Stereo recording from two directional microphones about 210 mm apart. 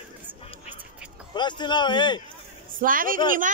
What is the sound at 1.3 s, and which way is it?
Speech, 20° left (ahead or behind).